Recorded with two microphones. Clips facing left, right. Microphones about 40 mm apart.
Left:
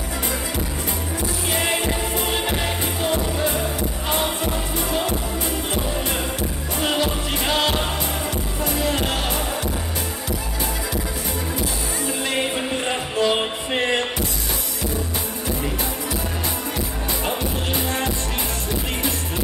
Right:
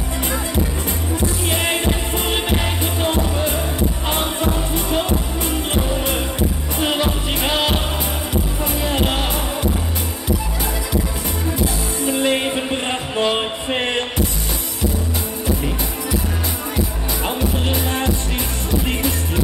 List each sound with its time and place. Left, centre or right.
1.5 s music: right
6.8 s music: right
8.7 s music: right
12.2 s music: right